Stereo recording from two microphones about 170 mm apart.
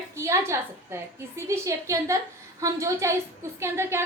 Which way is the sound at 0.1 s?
15° right (ahead or behind).